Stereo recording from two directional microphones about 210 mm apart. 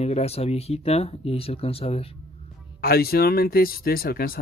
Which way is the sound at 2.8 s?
45° left (ahead or behind).